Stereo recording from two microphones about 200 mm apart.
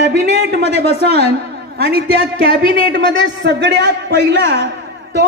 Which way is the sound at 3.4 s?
60° right (ahead or behind).